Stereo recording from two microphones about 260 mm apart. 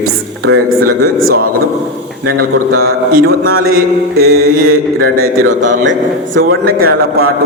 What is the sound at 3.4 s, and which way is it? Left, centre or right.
A man's voice, right.